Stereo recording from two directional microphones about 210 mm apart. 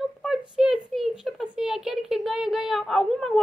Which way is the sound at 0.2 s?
5° right (ahead or behind).